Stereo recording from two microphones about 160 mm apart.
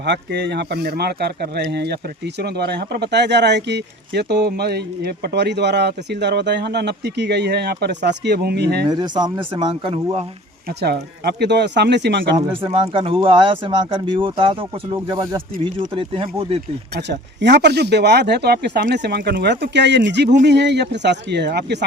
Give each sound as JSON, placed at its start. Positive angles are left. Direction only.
{"t": 0.0, "sound": "speech", "side_deg": -90}
{"t": 8.9, "sound": "speech", "side_deg": -25}
{"t": 10.7, "sound": "speech", "side_deg": -90}
{"t": 12.6, "sound": "speech", "side_deg": -35}
{"t": 16.9, "sound": "speech", "side_deg": -90}